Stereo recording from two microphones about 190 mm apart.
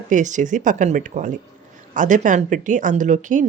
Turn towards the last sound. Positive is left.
turn(degrees=-40)  # may be behind; listen again after turning